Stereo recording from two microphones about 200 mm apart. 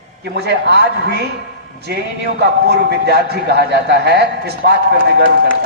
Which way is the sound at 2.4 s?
55° right (ahead or behind).